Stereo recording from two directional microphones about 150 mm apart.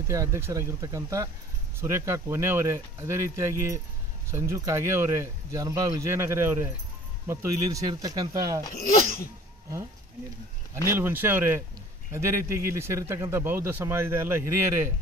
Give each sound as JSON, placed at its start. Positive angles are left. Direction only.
{"t": 0.1, "sound": "speech", "side_deg": -20}
{"t": 10.9, "sound": "speech", "side_deg": -15}